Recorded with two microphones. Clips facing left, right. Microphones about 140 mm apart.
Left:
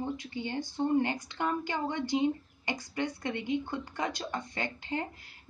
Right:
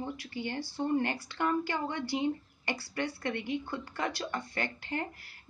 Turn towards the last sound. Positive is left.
turn(degrees=20)  # may be behind; listen again after turning